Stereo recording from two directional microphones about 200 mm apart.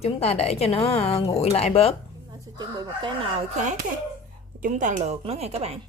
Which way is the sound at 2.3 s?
20° right (ahead or behind).